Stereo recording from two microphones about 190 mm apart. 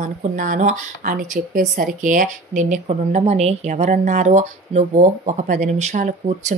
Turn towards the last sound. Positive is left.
turn(degrees=-40)  # may be behind; listen again after turning